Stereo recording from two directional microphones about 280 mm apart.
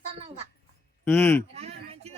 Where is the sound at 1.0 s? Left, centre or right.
Centre.